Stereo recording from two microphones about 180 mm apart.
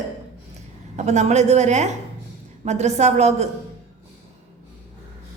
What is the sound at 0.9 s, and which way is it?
A woman's voice, 40° right (ahead or behind).